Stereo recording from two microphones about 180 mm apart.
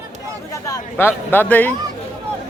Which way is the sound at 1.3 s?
10° left (ahead or behind).